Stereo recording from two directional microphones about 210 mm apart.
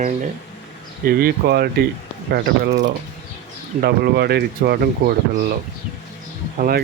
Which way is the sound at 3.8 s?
50° right (ahead or behind).